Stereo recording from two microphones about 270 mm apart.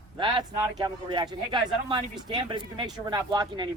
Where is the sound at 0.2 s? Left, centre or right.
Centre.